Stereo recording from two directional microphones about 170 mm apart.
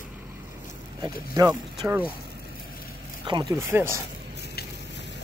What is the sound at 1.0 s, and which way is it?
Speech, 20° right (ahead or behind).